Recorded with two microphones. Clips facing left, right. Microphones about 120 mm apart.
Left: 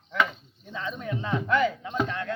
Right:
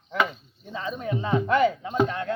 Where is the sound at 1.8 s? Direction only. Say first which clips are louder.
Right 4 dB; 35° right (ahead or behind).